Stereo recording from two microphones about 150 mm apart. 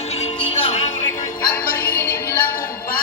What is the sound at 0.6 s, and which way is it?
Music, 45° left (ahead or behind).